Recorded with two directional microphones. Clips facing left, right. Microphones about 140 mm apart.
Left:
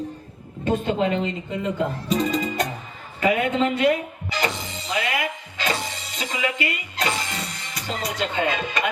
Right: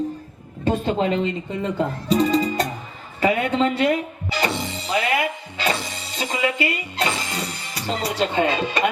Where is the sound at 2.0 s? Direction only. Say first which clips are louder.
Right 6 dB; 35° right (ahead or behind).